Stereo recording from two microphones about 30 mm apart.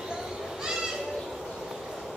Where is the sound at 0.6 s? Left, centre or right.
Right.